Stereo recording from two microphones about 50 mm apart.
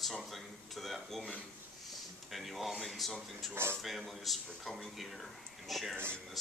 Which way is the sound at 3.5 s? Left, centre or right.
Right.